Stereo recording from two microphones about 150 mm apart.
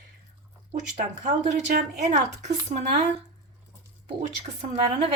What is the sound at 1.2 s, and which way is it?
Speech, 50° right (ahead or behind).